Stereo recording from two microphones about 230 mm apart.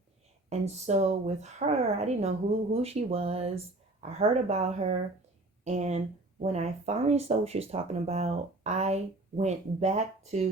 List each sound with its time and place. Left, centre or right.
0.6 s speech: right